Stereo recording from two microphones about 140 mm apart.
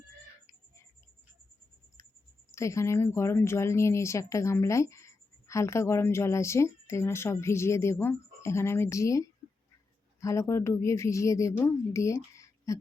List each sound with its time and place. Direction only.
2.5 s speech: 20° left (ahead or behind)